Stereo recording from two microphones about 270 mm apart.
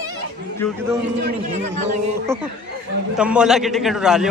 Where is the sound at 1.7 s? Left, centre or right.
Right.